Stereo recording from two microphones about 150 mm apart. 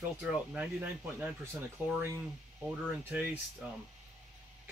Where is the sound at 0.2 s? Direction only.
10° right (ahead or behind).